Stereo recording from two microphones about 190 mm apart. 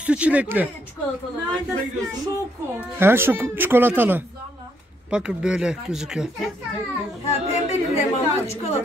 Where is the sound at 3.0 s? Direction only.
10° right (ahead or behind).